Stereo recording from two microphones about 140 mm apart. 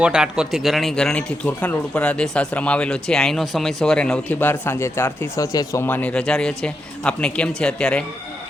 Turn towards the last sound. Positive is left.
turn(degrees=5)  # may be behind; listen again after turning